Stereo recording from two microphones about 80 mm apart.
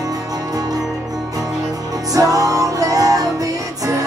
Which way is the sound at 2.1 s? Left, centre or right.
Right.